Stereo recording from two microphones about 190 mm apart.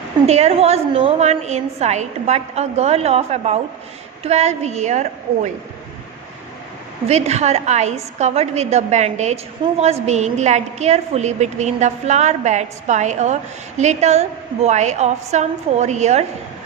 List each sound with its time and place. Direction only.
0.3 s a woman's voice: 35° right (ahead or behind)
7.1 s a woman's voice: 35° right (ahead or behind)